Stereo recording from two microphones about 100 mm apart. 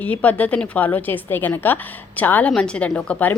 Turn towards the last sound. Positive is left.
turn(degrees=15)  # may be behind; listen again after turning